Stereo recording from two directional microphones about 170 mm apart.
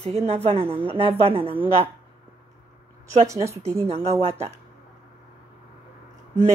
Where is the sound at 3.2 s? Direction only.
15° right (ahead or behind).